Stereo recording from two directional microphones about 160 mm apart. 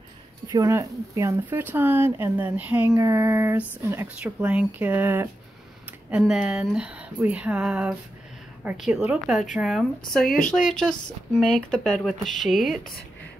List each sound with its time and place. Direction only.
0.5 s speech: 20° right (ahead or behind); by 10.2 s centre (ahead or behind)
10.2 s speech: 65° left (ahead or behind)
10.5 s speech: 5° left (ahead or behind)